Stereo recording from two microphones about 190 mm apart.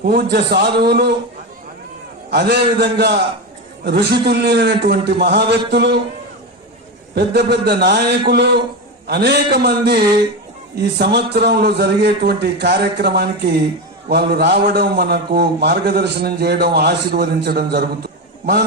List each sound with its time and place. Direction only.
0.0 s a man's voice: 55° right (ahead or behind)
2.3 s a man's voice: 60° right (ahead or behind)
7.2 s a man's voice: 60° right (ahead or behind)